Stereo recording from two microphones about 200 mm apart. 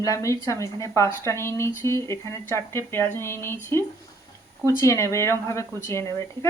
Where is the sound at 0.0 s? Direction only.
15° left (ahead or behind).